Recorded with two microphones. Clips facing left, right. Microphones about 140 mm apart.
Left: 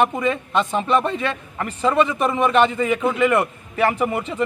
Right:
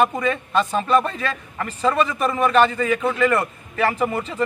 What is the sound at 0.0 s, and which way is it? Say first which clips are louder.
A man's voice: even; 20° left (ahead or behind).